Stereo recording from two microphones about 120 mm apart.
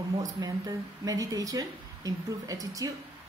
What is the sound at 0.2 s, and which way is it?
Speech, 30° right (ahead or behind).